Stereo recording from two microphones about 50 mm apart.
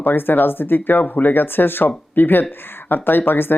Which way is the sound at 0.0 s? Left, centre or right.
Left.